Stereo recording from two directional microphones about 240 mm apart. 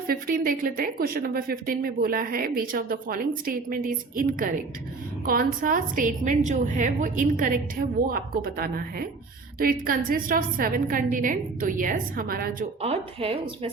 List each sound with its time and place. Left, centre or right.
0.1 s speech: right
12.8 s a woman's voice: right